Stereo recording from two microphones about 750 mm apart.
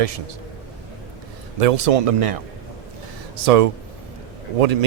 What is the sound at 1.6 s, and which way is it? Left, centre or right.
Speech, right.